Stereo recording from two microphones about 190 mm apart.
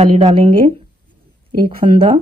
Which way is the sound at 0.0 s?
35° right (ahead or behind).